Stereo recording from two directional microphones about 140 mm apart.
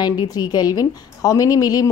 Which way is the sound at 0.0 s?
30° left (ahead or behind).